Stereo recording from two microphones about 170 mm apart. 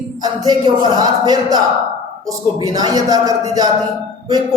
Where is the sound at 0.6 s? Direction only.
25° right (ahead or behind).